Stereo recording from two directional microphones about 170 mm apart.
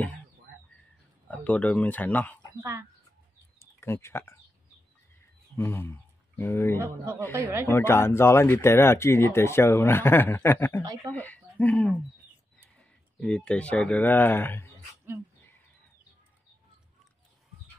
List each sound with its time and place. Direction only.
1.3 s speech: 10° left (ahead or behind)
3.5 s a sound: 15° left (ahead or behind)
5.6 s speech: 15° left (ahead or behind)
7.3 s speech: 15° right (ahead or behind)
7.6 s speech: 15° left (ahead or behind)
10.8 s speech: 20° right (ahead or behind)
11.1 s speech: 10° left (ahead or behind)
13.2 s speech: 5° left (ahead or behind)